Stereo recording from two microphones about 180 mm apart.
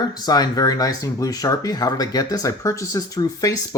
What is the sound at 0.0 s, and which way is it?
Speech, 20° left (ahead or behind).